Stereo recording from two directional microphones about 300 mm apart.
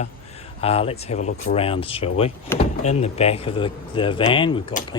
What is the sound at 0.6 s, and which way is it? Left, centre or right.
Speech, centre.